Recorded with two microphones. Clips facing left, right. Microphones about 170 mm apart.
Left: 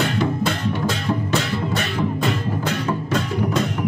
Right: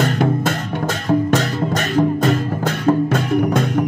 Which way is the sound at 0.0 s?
50° right (ahead or behind).